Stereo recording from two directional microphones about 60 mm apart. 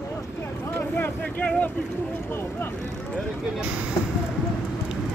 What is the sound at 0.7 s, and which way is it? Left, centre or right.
Speech, left.